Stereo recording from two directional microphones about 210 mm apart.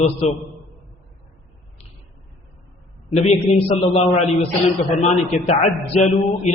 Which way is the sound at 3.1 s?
30° left (ahead or behind).